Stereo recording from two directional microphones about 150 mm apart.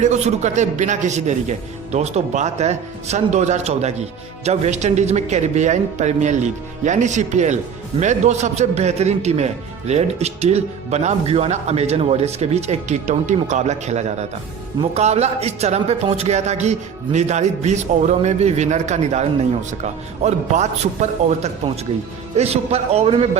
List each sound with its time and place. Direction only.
0.0 s speech: 50° right (ahead or behind)